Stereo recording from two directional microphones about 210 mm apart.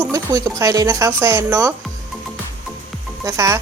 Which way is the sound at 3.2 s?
15° right (ahead or behind).